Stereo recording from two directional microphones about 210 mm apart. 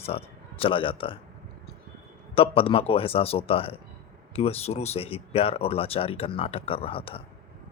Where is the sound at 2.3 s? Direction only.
25° left (ahead or behind).